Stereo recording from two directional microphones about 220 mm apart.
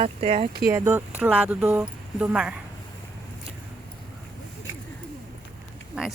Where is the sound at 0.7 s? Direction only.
10° right (ahead or behind).